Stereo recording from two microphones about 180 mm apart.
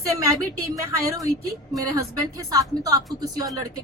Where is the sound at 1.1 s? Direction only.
20° right (ahead or behind).